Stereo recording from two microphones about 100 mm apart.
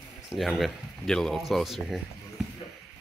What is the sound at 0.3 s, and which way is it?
Speech, centre (ahead or behind).